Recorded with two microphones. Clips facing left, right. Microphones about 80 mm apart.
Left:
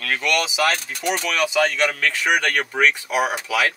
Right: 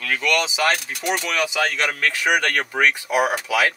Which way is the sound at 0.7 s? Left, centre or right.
Centre.